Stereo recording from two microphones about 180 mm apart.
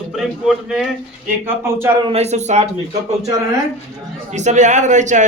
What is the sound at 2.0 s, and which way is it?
Speech, 35° right (ahead or behind).